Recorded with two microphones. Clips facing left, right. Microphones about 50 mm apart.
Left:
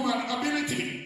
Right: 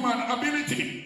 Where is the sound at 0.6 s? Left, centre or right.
Centre.